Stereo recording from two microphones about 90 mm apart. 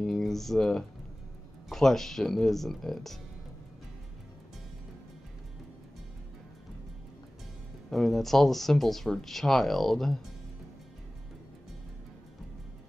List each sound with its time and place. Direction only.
0.0 s speech: centre (ahead or behind)
7.9 s speech: centre (ahead or behind)